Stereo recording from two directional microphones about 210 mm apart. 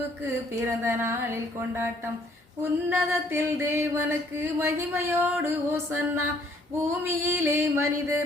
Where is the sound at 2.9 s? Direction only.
10° right (ahead or behind).